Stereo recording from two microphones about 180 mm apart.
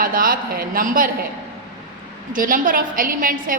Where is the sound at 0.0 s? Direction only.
50° right (ahead or behind).